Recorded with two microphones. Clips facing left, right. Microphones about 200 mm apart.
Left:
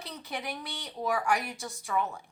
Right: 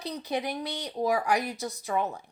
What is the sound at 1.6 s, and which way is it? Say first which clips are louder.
Speech: right 6 dB; 20° right (ahead or behind).